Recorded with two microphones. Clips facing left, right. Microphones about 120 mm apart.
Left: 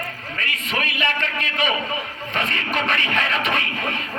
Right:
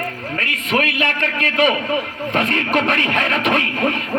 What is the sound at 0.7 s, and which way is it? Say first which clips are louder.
A man's voice: right 6 dB; 55° right (ahead or behind).